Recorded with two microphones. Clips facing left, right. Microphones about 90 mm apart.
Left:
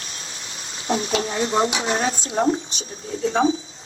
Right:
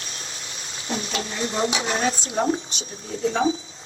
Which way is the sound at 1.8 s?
35° left (ahead or behind).